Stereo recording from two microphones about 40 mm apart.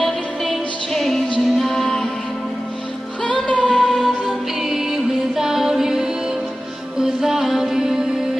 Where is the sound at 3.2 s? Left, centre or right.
Left.